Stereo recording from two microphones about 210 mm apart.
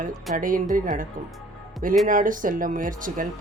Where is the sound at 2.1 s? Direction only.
40° right (ahead or behind).